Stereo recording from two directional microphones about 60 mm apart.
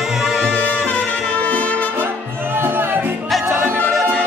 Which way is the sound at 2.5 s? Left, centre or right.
Right.